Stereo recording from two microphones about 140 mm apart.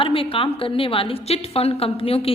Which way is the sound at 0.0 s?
40° left (ahead or behind).